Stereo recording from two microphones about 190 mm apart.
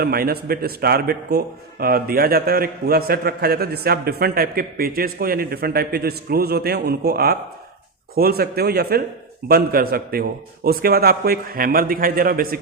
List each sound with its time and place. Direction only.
0.0 s a man's voice: 55° right (ahead or behind)